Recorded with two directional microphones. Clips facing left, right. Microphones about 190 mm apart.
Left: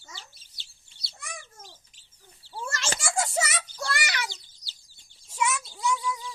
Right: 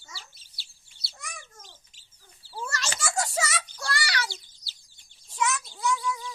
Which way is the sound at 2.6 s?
25° left (ahead or behind).